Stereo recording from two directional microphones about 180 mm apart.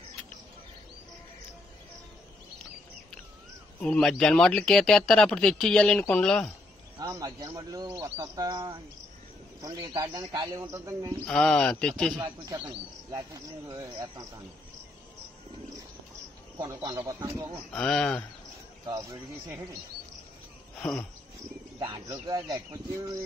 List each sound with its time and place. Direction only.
3.8 s speech: 5° left (ahead or behind)
7.0 s speech: 20° right (ahead or behind)
7.9 s speech: 30° right (ahead or behind)
8.4 s speech: 20° right (ahead or behind)
11.2 s speech: 5° left (ahead or behind)
12.2 s speech: 20° right (ahead or behind)
16.5 s speech: 20° right (ahead or behind)
17.7 s speech: 5° left (ahead or behind)
20.7 s speech: centre (ahead or behind)
21.9 s speech: 20° right (ahead or behind)